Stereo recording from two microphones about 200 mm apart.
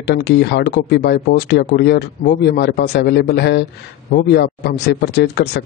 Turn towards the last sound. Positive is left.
turn(degrees=55)  # may be behind; listen again after turning